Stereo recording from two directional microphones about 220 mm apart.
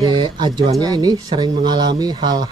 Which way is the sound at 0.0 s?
20° right (ahead or behind).